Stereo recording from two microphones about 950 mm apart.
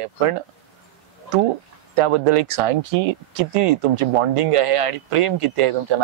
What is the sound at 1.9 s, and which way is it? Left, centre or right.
Speech, right.